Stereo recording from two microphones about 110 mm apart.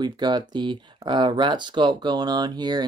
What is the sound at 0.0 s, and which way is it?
Speech, 40° right (ahead or behind).